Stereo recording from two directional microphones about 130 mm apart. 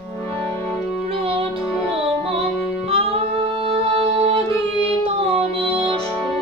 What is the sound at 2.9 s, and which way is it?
Music, 45° right (ahead or behind).